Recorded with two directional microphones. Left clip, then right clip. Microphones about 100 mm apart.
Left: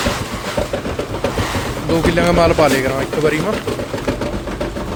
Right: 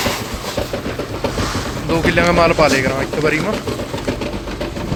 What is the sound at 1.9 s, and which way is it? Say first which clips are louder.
Speech: even; 15° left (ahead or behind).